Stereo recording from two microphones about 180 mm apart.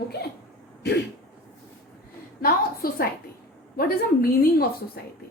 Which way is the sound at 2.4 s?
55° left (ahead or behind).